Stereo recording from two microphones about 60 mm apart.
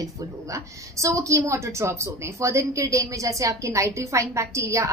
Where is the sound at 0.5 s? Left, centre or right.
Right.